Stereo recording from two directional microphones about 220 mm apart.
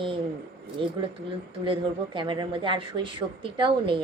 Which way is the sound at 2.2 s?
20° right (ahead or behind).